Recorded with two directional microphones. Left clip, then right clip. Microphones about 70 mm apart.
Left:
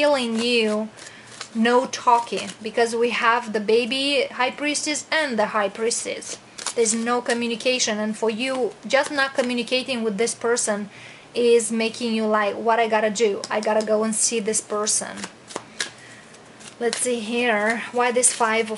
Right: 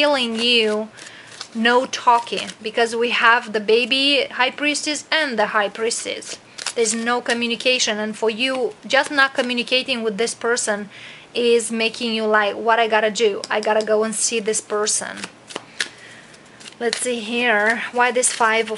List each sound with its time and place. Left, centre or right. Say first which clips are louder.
0.0 s speech: right 2 dB; centre
15.1 s shuffling cards: right 2 dB; centre
17.0 s speech: right 2 dB; right